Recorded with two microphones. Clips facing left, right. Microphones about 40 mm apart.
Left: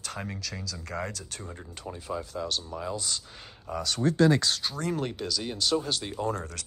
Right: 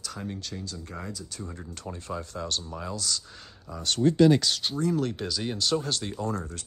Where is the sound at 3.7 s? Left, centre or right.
Left.